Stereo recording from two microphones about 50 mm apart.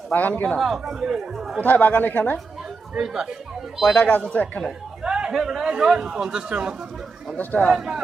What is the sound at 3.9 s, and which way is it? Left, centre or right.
Speech, left.